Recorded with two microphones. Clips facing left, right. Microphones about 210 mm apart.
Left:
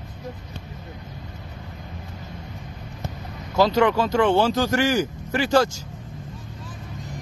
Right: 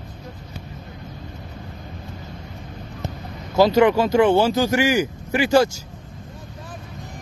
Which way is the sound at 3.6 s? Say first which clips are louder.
Right 4 dB; 5° right (ahead or behind).